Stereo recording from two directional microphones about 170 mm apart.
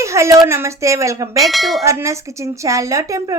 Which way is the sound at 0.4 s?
15° right (ahead or behind).